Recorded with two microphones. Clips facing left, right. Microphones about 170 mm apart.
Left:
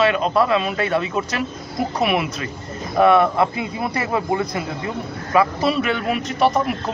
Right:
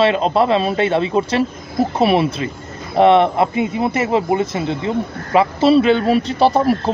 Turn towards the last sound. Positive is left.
turn(degrees=-30)  # may be behind; listen again after turning